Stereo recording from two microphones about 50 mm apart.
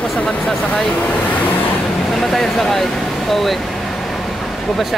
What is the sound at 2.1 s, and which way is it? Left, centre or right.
Speech, centre.